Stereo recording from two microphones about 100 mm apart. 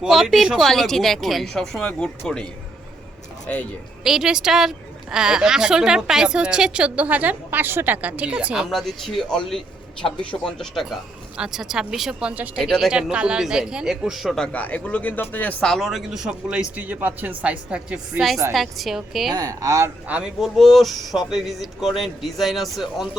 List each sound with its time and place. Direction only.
0.0 s speech: centre (ahead or behind)
4.0 s a woman's voice: 5° right (ahead or behind)
8.7 s speech: 5° left (ahead or behind)
12.3 s a woman's voice: 15° right (ahead or behind); by 15.7 s 15° left (ahead or behind)
15.7 s a woman's voice: centre (ahead or behind)
19.3 s speech: 40° right (ahead or behind)
20.1 s a woman's voice: 10° right (ahead or behind)
20.4 s speech: centre (ahead or behind)